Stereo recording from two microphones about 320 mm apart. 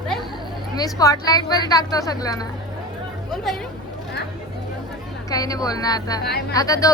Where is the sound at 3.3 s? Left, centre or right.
Centre.